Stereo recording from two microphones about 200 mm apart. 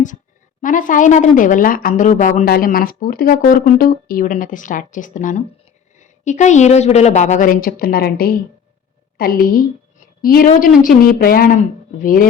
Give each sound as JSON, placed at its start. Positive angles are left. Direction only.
{"t": 0.6, "sound": "a woman's voice", "side_deg": 40}